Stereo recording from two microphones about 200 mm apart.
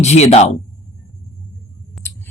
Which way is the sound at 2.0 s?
Centre (ahead or behind).